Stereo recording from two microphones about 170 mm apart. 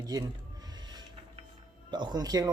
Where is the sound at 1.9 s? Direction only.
25° right (ahead or behind).